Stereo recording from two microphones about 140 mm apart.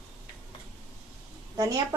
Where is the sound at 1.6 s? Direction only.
25° right (ahead or behind).